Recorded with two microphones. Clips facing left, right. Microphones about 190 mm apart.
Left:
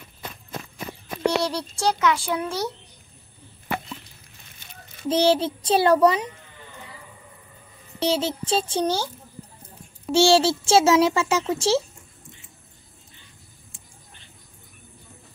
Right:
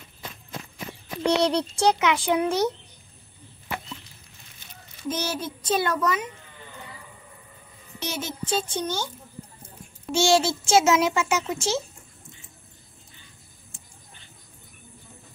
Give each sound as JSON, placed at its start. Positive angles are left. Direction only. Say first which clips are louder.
{"t": 0.2, "sound": "walk", "louder": "left 2 dB", "side_deg": 50}
{"t": 1.4, "sound": "speech", "louder": "right 3 dB", "side_deg": -20}
{"t": 5.0, "sound": "a child's voice", "louder": "left 9 dB", "side_deg": 30}
{"t": 8.0, "sound": "a child's voice", "louder": "left 8 dB", "side_deg": 30}
{"t": 10.1, "sound": "a child's voice", "louder": "left 4 dB", "side_deg": 30}